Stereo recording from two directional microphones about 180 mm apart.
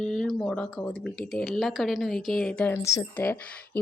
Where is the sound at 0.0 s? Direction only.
Centre (ahead or behind).